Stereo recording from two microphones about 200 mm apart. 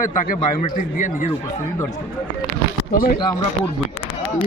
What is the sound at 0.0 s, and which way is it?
A man's voice, 40° left (ahead or behind).